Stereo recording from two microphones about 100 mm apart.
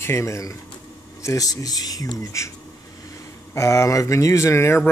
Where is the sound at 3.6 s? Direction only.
30° left (ahead or behind).